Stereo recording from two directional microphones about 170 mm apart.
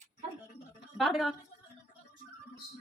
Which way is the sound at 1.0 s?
Centre (ahead or behind).